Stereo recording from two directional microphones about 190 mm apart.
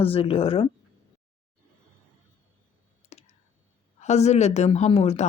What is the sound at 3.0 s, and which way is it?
Clicking, 35° left (ahead or behind).